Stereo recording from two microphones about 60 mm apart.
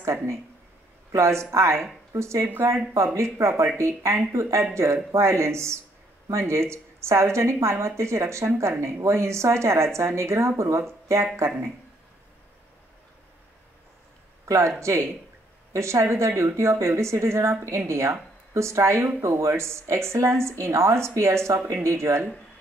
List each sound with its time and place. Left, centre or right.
0.0 s a woman's voice: right
14.4 s a sound: right
14.8 s a woman's voice: right